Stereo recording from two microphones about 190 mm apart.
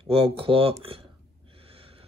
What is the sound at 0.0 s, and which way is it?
Speech, 30° right (ahead or behind).